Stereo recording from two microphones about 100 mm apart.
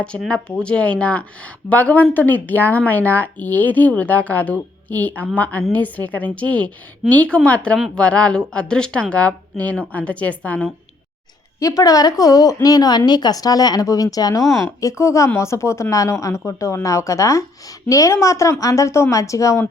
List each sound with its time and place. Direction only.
0.3 s speech: 10° left (ahead or behind)
11.6 s speech: 35° left (ahead or behind)